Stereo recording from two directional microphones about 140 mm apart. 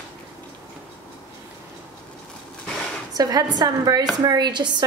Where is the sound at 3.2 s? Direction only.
25° right (ahead or behind).